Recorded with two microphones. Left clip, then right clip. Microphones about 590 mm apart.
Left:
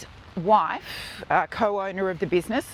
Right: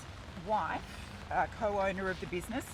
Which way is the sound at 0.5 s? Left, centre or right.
Left.